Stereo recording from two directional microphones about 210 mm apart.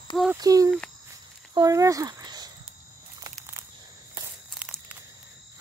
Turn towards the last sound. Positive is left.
turn(degrees=-10)  # may be behind; listen again after turning